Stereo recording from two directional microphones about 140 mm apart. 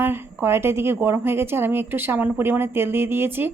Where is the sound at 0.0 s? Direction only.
15° right (ahead or behind).